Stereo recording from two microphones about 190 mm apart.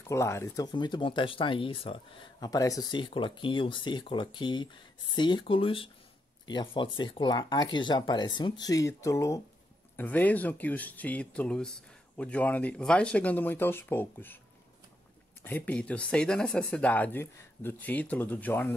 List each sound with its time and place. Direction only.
0.0 s speech: 15° left (ahead or behind)
15.4 s speech: 10° left (ahead or behind)